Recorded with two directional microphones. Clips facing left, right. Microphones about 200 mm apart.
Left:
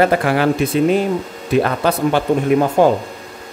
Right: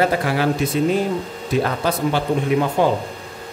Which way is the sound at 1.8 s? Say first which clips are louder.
Left 4 dB; 50° left (ahead or behind).